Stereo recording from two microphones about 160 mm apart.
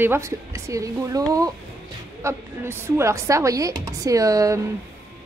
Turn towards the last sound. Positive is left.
turn(degrees=-20)  # may be behind; listen again after turning